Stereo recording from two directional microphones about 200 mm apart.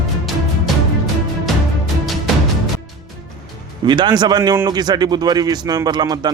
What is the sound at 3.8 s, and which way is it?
A man's voice, 20° right (ahead or behind).